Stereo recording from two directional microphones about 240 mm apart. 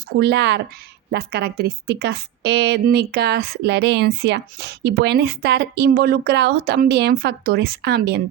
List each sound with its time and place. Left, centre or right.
0.2 s a woman's voice: right